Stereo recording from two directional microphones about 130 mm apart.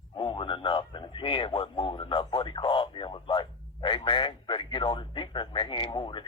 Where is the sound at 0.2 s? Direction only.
40° left (ahead or behind).